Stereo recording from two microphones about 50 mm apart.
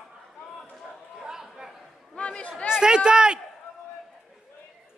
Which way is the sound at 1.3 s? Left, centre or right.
Centre.